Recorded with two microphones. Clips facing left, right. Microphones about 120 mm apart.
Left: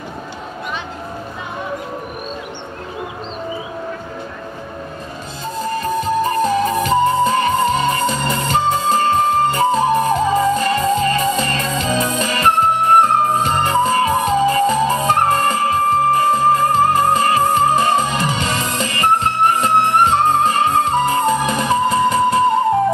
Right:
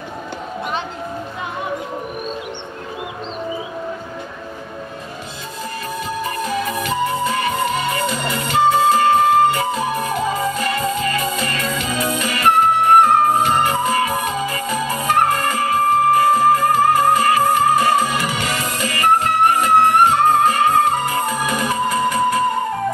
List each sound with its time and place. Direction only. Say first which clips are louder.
5.7 s music: left 8 dB; 35° left (ahead or behind)